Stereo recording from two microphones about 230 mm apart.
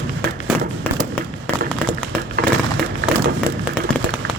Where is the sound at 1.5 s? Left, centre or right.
Centre.